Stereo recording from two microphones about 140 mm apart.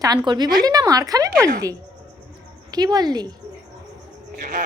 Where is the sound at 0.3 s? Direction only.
30° right (ahead or behind).